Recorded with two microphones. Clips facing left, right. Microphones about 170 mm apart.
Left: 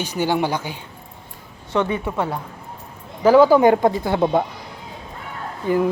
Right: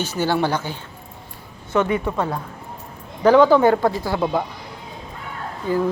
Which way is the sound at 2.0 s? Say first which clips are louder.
Even; 10° left (ahead or behind).